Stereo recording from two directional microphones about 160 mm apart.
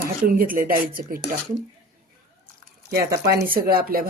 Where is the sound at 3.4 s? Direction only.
65° right (ahead or behind).